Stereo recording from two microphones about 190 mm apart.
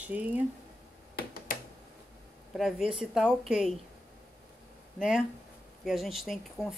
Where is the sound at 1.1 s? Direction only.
50° left (ahead or behind).